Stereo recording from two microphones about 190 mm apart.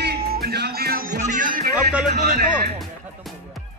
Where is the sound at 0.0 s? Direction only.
55° right (ahead or behind).